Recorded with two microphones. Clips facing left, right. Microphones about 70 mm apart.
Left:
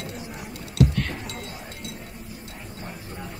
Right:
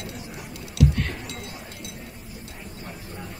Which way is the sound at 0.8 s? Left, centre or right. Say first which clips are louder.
Even; left.